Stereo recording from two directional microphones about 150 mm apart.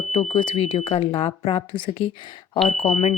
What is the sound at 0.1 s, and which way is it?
Speech, 35° left (ahead or behind).